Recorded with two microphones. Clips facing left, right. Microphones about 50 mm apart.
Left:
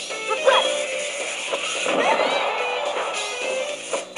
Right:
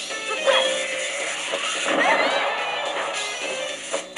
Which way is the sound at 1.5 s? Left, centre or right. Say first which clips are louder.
Even; centre.